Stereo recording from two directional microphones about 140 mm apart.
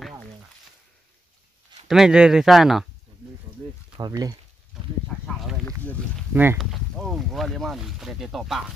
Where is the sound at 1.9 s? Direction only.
5° right (ahead or behind).